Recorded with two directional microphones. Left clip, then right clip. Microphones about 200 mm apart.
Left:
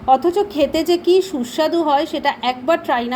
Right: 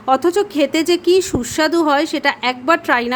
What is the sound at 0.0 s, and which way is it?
Speech, 25° right (ahead or behind).